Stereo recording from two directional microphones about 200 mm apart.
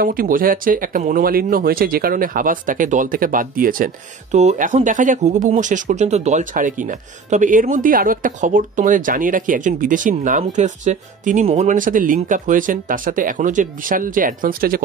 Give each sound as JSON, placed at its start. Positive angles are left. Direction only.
{"t": 0.0, "sound": "speech", "side_deg": -45}